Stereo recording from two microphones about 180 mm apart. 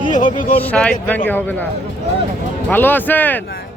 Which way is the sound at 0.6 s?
5° left (ahead or behind).